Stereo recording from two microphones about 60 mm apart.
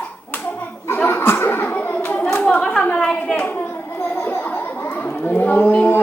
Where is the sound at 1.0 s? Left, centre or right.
Left.